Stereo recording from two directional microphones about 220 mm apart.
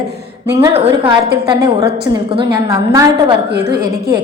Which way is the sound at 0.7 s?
20° right (ahead or behind).